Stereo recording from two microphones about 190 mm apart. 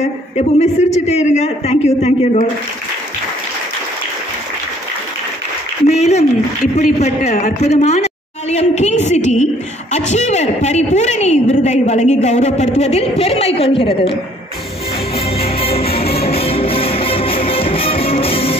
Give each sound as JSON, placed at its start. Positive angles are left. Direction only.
{"t": 0.4, "sound": "a woman's voice", "side_deg": 35}
{"t": 5.9, "sound": "a woman's voice", "side_deg": 35}
{"t": 15.4, "sound": "music", "side_deg": 30}